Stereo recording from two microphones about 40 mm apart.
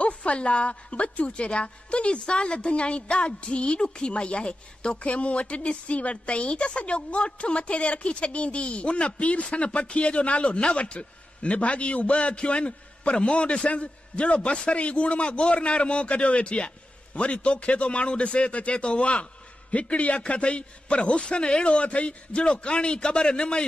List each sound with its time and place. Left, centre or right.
0.0 s a woman's voice: left